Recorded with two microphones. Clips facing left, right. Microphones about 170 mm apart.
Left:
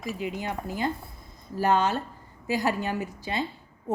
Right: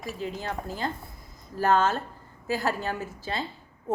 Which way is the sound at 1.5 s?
15° left (ahead or behind).